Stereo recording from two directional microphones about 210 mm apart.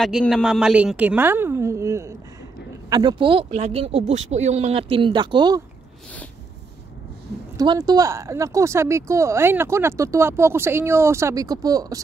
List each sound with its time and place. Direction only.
0.0 s speech: centre (ahead or behind); by 5.6 s 20° right (ahead or behind)
7.5 s speech: 20° right (ahead or behind)